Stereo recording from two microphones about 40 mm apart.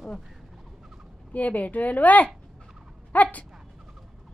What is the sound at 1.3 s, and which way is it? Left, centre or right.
Speech, left.